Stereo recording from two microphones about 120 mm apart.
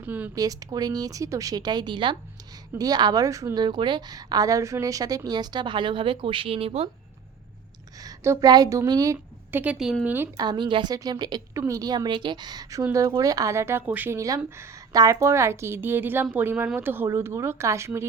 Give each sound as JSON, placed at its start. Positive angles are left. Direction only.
{"t": 0.0, "sound": "speech", "side_deg": -15}
{"t": 0.3, "sound": "a woman's voice", "side_deg": -30}
{"t": 8.0, "sound": "a woman's voice", "side_deg": -25}
{"t": 9.5, "sound": "a woman's voice", "side_deg": -15}
{"t": 9.7, "sound": "speech", "side_deg": -5}
{"t": 10.3, "sound": "a woman's voice", "side_deg": -35}
{"t": 14.2, "sound": "speech", "side_deg": -25}